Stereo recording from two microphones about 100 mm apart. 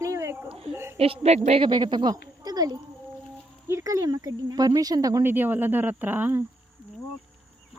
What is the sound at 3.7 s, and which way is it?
Speech, 30° right (ahead or behind).